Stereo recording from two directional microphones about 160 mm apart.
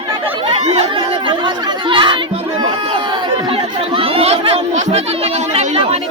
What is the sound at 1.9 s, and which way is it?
Chatter, 30° right (ahead or behind).